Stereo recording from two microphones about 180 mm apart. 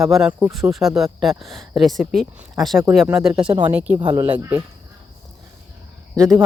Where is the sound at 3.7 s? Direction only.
5° right (ahead or behind).